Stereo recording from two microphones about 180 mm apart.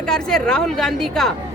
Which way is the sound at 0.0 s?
5° left (ahead or behind).